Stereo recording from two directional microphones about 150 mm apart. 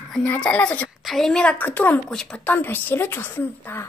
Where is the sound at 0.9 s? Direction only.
Centre (ahead or behind).